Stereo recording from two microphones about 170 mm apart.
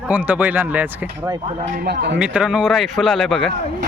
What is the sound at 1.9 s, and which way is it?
Speech, 90° right.